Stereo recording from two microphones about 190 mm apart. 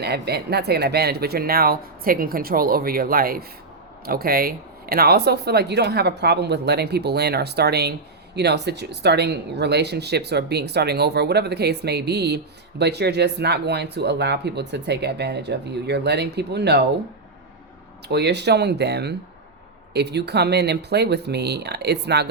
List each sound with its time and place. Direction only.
0.0 s speech: 60° right (ahead or behind)
18.1 s speech: 60° right (ahead or behind)